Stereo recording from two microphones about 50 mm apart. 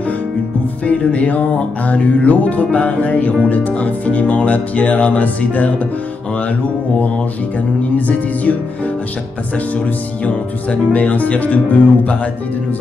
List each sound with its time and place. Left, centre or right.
0.8 s music: left
10.2 s speech: left